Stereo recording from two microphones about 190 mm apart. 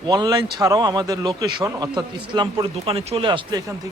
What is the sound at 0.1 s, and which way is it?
A man's voice, 20° right (ahead or behind).